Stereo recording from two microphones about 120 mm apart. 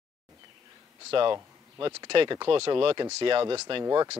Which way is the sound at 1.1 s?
45° right (ahead or behind).